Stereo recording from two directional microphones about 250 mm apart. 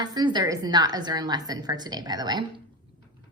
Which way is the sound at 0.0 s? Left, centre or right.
Centre.